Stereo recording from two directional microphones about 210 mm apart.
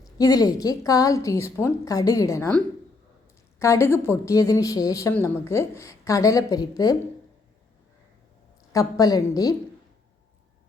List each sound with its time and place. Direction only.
0.0 s a woman's voice: 15° left (ahead or behind)
8.7 s a woman's voice: 15° left (ahead or behind)